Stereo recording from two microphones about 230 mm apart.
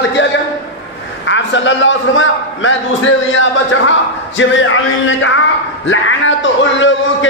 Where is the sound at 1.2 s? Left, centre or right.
Left.